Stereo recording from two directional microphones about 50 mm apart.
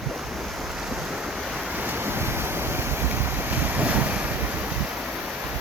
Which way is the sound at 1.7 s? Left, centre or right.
Right.